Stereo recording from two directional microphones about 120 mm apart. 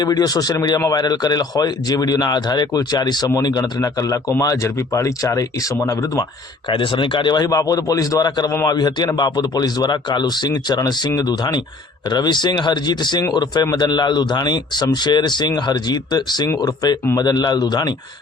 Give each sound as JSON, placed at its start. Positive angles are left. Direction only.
{"t": 0.0, "sound": "speech", "side_deg": 35}
{"t": 6.7, "sound": "speech", "side_deg": 45}